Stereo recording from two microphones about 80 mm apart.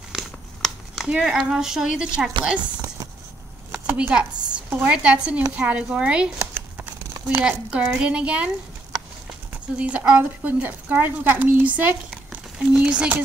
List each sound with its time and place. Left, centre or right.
0.1 s a sound: centre
1.0 s a woman's voice: centre
3.8 s a woman's voice: centre
6.5 s crumpling: right
7.2 s a woman's voice: centre
9.5 s speech: centre